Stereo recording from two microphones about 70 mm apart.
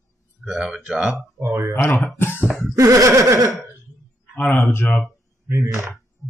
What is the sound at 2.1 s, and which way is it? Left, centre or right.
Cough, left.